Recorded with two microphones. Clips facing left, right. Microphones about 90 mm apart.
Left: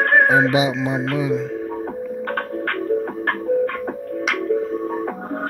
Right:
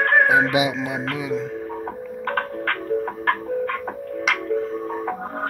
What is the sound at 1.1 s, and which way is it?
Speech, 30° left (ahead or behind).